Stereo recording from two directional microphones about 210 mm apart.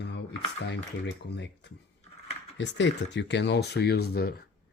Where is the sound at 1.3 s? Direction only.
55° left (ahead or behind).